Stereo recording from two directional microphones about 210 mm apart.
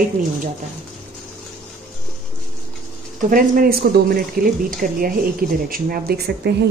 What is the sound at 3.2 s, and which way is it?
Speech, 40° right (ahead or behind).